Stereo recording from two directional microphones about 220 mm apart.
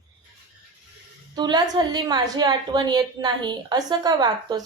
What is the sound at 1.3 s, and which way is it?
A woman's voice, 20° right (ahead or behind).